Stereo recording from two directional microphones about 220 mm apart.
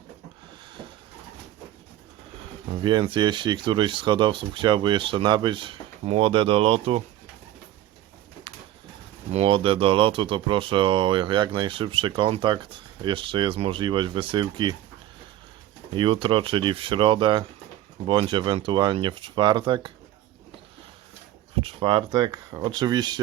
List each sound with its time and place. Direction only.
2.8 s speech: 20° right (ahead or behind)
8.5 s pigeon: 25° right (ahead or behind)
9.3 s speech: 25° right (ahead or behind)
16.0 s speech: 20° right (ahead or behind)
21.5 s speech: 25° right (ahead or behind)